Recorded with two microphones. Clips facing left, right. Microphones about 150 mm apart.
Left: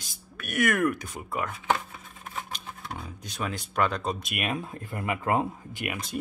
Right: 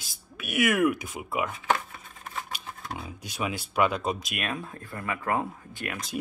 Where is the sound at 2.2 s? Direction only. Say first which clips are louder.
Even; 5° right (ahead or behind).